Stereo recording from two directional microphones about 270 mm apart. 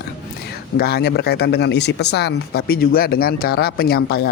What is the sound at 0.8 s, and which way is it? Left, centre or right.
Speech, left.